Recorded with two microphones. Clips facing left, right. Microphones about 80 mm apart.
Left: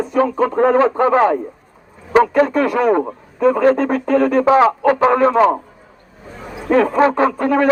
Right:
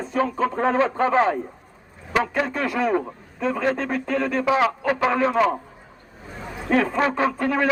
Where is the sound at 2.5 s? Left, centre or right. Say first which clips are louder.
Left 8 dB; left.